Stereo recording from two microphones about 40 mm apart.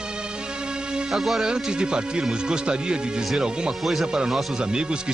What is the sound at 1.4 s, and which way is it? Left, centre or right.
Speech, right.